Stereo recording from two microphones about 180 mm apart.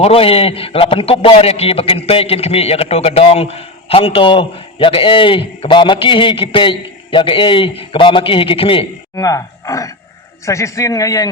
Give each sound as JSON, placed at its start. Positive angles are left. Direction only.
{"t": 0.0, "sound": "a man's voice", "side_deg": 30}
{"t": 9.1, "sound": "a man's voice", "side_deg": 20}